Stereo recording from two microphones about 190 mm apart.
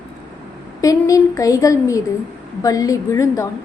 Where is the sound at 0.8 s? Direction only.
15° left (ahead or behind).